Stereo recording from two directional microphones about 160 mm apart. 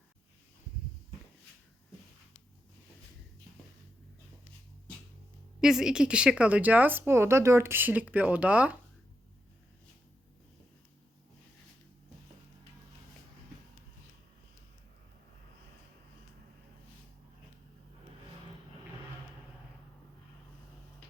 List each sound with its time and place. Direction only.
5.5 s speech: 5° right (ahead or behind)